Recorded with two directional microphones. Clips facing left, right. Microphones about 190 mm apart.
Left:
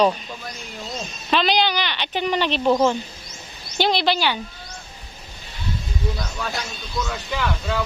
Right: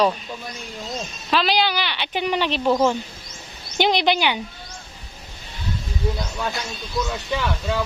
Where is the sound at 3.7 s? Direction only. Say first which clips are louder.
Right 1 dB; 15° right (ahead or behind).